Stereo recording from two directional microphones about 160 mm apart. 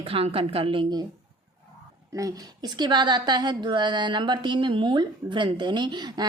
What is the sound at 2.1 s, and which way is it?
A woman's voice, 20° right (ahead or behind).